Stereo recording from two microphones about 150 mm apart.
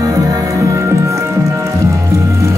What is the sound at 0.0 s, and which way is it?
Music, 25° right (ahead or behind).